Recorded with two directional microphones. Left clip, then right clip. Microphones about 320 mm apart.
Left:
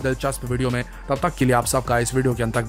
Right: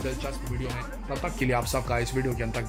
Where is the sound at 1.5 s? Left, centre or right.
Centre.